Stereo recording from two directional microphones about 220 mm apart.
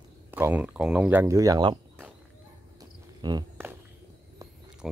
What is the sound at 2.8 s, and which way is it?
Cricket, 20° right (ahead or behind).